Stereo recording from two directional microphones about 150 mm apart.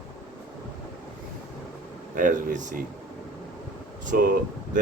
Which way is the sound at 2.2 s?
65° right (ahead or behind).